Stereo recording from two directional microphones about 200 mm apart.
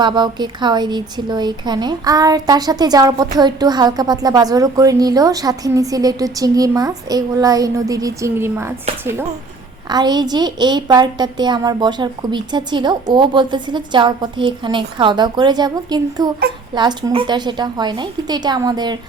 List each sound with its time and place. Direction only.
0.0 s speech: 20° right (ahead or behind)